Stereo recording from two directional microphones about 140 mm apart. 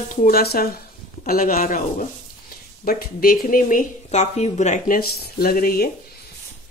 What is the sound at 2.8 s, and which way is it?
Speech, 90° left.